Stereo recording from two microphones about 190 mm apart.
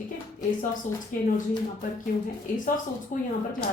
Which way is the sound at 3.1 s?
40° left (ahead or behind).